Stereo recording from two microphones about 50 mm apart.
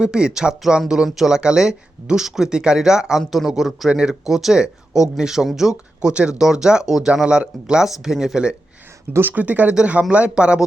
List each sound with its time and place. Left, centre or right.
0.0 s a man's voice: centre
3.8 s speech: centre
4.1 s speech: centre
6.0 s speech: centre
9.3 s speech: right